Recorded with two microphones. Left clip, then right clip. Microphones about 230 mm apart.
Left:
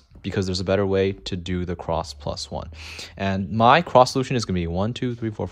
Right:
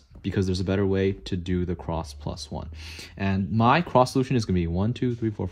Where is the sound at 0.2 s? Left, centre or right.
Left.